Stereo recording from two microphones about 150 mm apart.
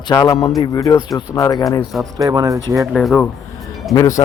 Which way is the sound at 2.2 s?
25° right (ahead or behind).